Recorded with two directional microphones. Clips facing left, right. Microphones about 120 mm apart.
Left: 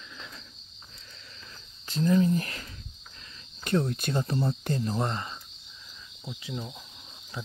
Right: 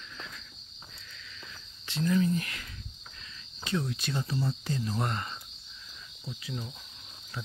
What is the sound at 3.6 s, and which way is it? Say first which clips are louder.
Speech: left 5 dB; 45° left (ahead or behind).